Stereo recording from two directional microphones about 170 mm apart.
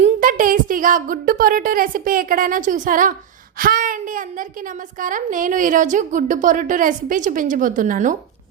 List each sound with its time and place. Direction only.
0.0 s a woman's voice: 50° right (ahead or behind)